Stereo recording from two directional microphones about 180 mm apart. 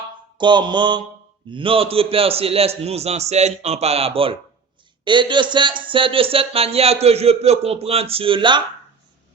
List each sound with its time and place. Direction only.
0.3 s mantra: 25° right (ahead or behind)
1.5 s speech: 30° right (ahead or behind)